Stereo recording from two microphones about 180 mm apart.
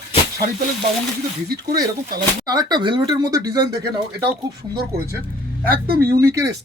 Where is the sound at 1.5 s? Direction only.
60° right (ahead or behind).